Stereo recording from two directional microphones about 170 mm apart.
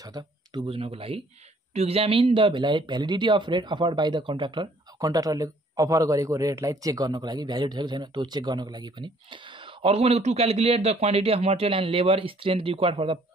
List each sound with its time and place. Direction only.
0.0 s speech: 25° right (ahead or behind)